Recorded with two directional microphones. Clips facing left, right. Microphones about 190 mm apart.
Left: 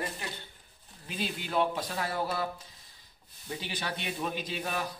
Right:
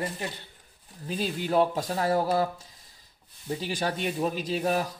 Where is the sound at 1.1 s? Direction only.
40° right (ahead or behind).